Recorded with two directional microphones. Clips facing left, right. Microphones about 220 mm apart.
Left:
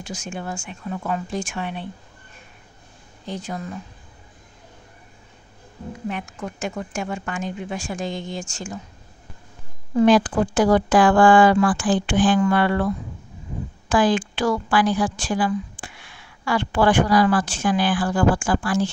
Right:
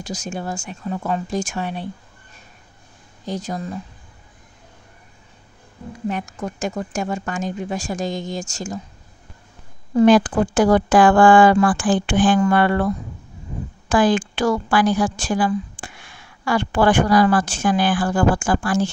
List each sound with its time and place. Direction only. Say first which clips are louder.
0.0 s a woman's voice: right 3 dB; 40° right (ahead or behind)
3.3 s a woman's voice: right 3 dB; 40° right (ahead or behind)
6.0 s a woman's voice: right 4 dB; 40° right (ahead or behind)
9.9 s speech: right 2 dB; 50° right (ahead or behind)